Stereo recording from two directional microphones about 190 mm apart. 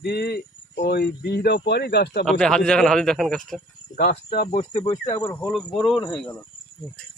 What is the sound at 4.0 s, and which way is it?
Speech, 55° left (ahead or behind).